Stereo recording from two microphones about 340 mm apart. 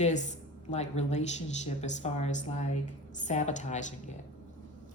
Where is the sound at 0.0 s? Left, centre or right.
Left.